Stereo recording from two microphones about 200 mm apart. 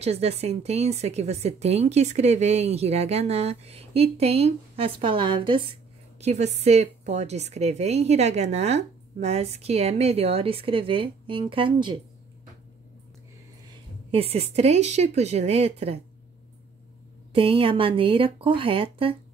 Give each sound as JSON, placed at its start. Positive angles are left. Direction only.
{"t": 0.0, "sound": "a woman's voice", "side_deg": -30}
{"t": 14.1, "sound": "a woman's voice", "side_deg": -30}
{"t": 17.3, "sound": "speech", "side_deg": -25}